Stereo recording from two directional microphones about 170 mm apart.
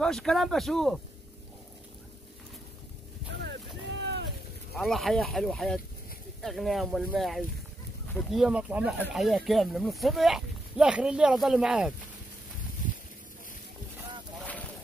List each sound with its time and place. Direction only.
0.0 s speech: centre (ahead or behind)
3.3 s music: 80° right
4.0 s a sound: 90° right
4.7 s speech: centre (ahead or behind)